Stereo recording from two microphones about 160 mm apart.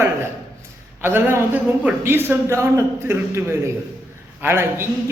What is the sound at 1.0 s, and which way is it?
A man's voice, 15° right (ahead or behind).